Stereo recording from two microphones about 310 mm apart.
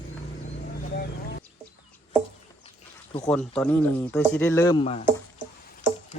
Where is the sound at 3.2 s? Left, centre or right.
Centre.